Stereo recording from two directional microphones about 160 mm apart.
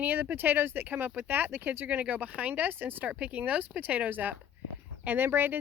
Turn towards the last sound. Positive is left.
turn(degrees=-10)  # may be behind; listen again after turning